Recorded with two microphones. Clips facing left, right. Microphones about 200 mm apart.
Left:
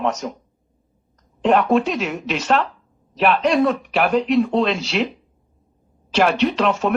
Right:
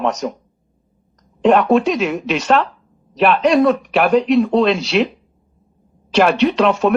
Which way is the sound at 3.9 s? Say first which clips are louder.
Right 3 dB; 70° right (ahead or behind).